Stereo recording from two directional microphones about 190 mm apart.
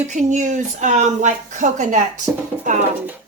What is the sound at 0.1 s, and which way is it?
Speech, 40° right (ahead or behind).